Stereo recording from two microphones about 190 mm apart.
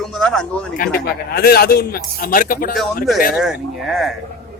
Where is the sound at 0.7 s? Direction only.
50° left (ahead or behind).